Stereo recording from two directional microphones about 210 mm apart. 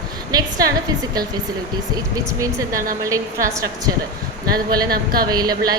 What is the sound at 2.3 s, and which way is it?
A woman's voice, 15° right (ahead or behind).